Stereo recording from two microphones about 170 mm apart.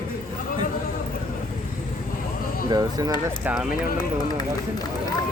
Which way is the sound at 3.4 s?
5° right (ahead or behind).